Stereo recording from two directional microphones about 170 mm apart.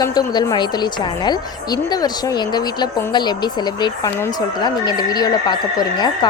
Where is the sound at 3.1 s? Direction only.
25° left (ahead or behind).